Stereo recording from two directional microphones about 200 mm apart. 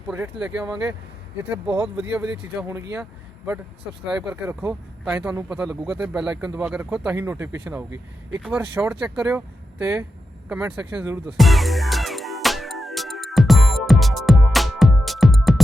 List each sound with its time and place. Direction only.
0.1 s speech: 5° right (ahead or behind)
2.1 s speech: 5° right (ahead or behind)
11.3 s music: centre (ahead or behind)